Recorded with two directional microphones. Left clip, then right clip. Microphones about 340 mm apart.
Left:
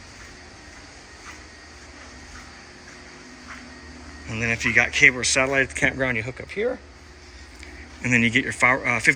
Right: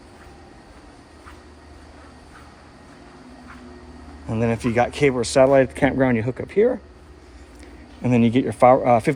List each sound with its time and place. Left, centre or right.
4.3 s speech: centre
8.0 s speech: centre